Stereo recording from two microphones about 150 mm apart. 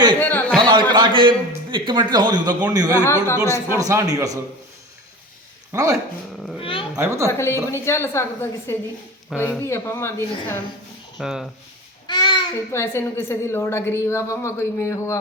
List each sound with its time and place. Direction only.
0.2 s a sound: 10° left (ahead or behind)
0.9 s a man's voice: 35° right (ahead or behind)
2.9 s a woman's voice: 15° left (ahead or behind)
3.3 s a man's voice: 20° right (ahead or behind)
5.7 s a man's voice: 20° right (ahead or behind)
6.3 s speech: 5° left (ahead or behind)
6.6 s a woman's voice: 35° left (ahead or behind)
6.9 s a man's voice: 20° right (ahead or behind)
7.3 s a woman's voice: 20° left (ahead or behind)
9.3 s speech: 5° right (ahead or behind)
9.6 s a woman's voice: 15° left (ahead or behind)
11.2 s speech: 5° right (ahead or behind)
12.0 s babbling: 30° left (ahead or behind)
12.7 s a woman's voice: 15° left (ahead or behind)